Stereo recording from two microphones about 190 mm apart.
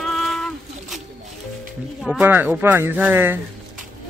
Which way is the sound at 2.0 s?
Centre (ahead or behind).